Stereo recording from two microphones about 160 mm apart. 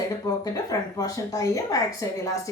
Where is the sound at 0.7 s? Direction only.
20° left (ahead or behind).